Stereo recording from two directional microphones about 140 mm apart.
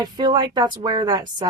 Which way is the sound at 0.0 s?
30° right (ahead or behind).